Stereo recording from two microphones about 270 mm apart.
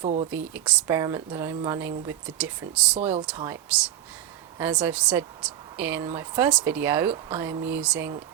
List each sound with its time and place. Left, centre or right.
0.0 s speech: right
0.3 s a woman's voice: centre
3.0 s a woman's voice: right; by 8.1 s centre